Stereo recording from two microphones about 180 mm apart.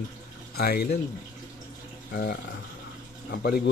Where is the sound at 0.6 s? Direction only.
60° left (ahead or behind).